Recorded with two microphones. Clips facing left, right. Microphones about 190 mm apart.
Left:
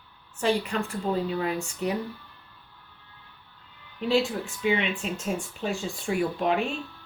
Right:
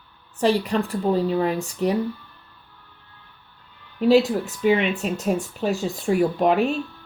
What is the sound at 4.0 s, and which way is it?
Speech, 40° right (ahead or behind).